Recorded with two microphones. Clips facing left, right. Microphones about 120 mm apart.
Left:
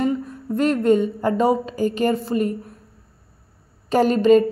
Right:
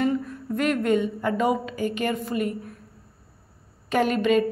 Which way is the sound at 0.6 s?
30° left (ahead or behind).